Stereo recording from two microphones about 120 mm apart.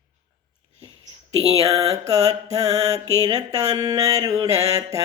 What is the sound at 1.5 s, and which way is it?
Mantra, 30° right (ahead or behind).